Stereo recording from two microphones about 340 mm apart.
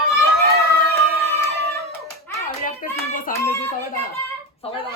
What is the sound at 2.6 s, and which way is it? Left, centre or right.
Hands, left.